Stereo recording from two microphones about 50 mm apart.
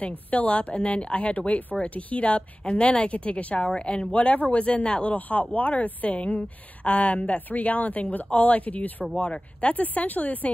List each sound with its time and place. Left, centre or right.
0.0 s speech: left